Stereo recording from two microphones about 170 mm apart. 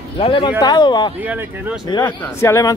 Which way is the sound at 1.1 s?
10° right (ahead or behind).